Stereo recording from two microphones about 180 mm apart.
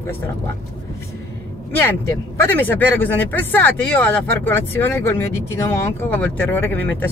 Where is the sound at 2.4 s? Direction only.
10° left (ahead or behind).